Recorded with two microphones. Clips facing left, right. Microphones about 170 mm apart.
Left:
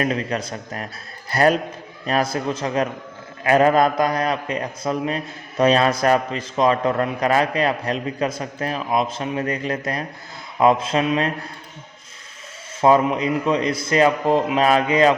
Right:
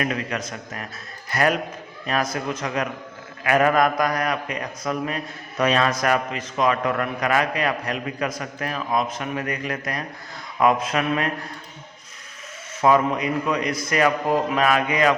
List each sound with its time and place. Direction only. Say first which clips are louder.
0.0 s a man's voice: left 3 dB; 30° left (ahead or behind)
12.8 s a man's voice: left 3 dB; 30° left (ahead or behind)